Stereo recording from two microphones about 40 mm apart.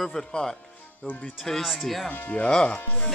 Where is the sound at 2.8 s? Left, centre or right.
Left.